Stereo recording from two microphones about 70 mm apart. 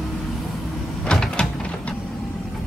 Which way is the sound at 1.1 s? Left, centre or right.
Centre.